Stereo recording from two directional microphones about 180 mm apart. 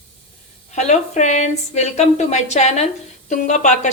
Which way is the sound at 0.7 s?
40° left (ahead or behind).